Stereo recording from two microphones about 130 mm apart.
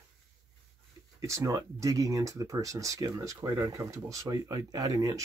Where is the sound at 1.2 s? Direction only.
25° right (ahead or behind).